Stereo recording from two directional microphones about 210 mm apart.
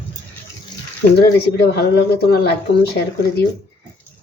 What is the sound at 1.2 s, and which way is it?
A woman's voice, 50° left (ahead or behind).